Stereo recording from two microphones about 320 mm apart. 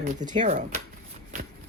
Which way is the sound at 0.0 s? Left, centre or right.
Right.